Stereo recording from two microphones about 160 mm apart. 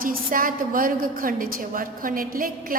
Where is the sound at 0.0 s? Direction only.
60° right (ahead or behind).